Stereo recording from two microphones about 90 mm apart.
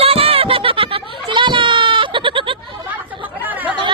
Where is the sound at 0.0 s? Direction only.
90° right; by 2.6 s 70° right (ahead or behind).